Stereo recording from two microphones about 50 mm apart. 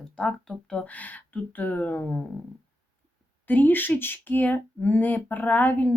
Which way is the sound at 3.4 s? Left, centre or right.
Left.